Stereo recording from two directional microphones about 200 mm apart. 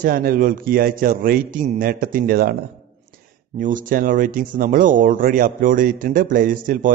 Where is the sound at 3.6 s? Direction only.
40° right (ahead or behind).